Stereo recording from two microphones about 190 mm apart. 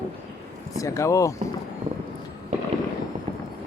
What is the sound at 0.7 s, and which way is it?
Speech, 15° left (ahead or behind).